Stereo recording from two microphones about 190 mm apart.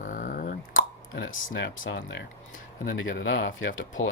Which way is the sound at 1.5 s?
65° left (ahead or behind).